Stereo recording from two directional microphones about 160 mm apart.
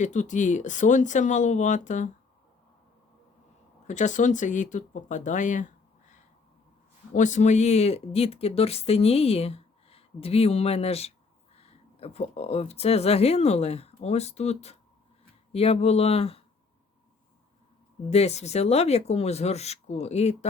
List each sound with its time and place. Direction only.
0.0 s speech: 50° left (ahead or behind)
3.8 s speech: 50° left (ahead or behind)
18.1 s speech: 40° left (ahead or behind)